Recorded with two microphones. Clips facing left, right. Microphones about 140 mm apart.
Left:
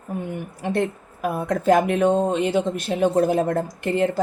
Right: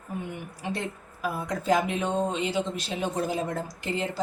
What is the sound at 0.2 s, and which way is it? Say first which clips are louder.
Speech: left 7 dB; 50° left (ahead or behind).